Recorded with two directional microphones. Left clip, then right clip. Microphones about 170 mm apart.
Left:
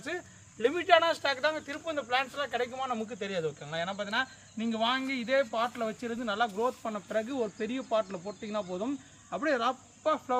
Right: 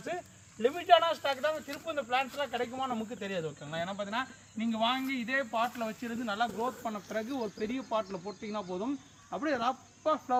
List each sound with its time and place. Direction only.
0.6 s speech: 30° left (ahead or behind)